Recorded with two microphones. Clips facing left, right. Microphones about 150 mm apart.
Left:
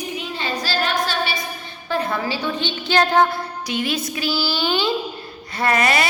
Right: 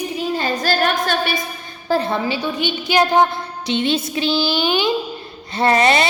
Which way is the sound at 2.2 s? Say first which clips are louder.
Right 3 dB; 15° right (ahead or behind).